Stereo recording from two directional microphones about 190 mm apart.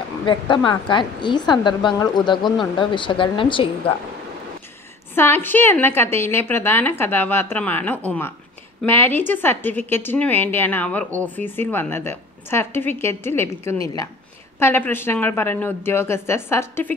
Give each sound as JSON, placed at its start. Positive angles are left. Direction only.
{"t": 0.2, "sound": "a woman's voice", "side_deg": 25}
{"t": 2.4, "sound": "speech", "side_deg": 0}
{"t": 2.8, "sound": "a woman's voice", "side_deg": 25}
{"t": 5.1, "sound": "a woman's voice", "side_deg": 10}